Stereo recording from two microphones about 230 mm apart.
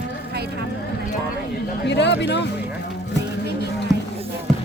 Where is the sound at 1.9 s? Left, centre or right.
Left.